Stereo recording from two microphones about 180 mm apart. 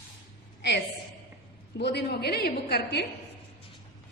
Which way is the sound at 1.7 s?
70° left (ahead or behind).